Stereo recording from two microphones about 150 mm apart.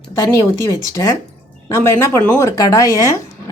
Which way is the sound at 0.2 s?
20° left (ahead or behind).